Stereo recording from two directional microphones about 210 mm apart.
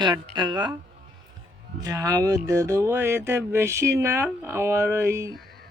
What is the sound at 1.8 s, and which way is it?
Speech, 15° right (ahead or behind).